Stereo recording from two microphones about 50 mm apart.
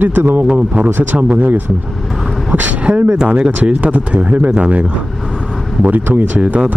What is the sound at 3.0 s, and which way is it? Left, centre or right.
Speech, centre.